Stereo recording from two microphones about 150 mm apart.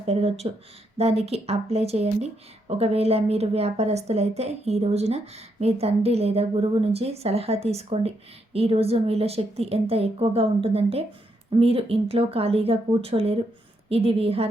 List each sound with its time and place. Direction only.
0.0 s a woman's voice: 40° right (ahead or behind)